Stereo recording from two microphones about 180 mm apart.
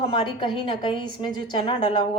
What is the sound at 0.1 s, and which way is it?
Speech, 25° left (ahead or behind).